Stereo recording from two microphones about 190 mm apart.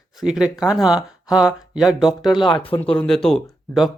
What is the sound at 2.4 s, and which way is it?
Speech, 25° left (ahead or behind).